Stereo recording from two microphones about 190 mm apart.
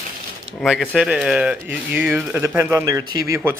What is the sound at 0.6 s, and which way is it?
Speech, centre (ahead or behind).